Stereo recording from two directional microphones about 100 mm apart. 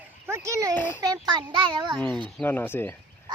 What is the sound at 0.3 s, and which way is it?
Speech, 30° right (ahead or behind).